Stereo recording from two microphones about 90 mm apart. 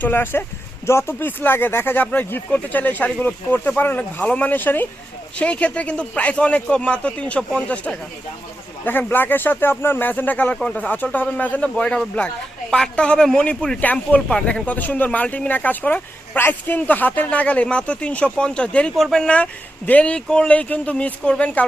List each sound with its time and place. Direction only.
0.0 s a man's voice: 25° left (ahead or behind)